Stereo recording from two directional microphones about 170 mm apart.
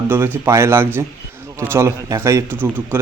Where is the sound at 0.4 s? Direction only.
15° right (ahead or behind).